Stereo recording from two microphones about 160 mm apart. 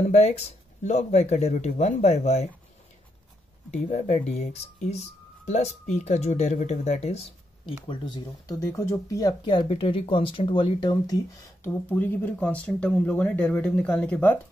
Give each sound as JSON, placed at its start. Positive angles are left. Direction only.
{"t": 0.0, "sound": "speech", "side_deg": 45}
{"t": 3.7, "sound": "speech", "side_deg": 45}
{"t": 11.6, "sound": "speech", "side_deg": 10}